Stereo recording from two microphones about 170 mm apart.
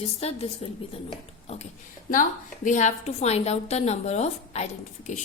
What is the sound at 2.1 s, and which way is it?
A woman's voice, 50° left (ahead or behind).